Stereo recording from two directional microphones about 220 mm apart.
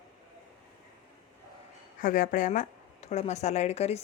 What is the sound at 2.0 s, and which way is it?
Speech, 35° left (ahead or behind).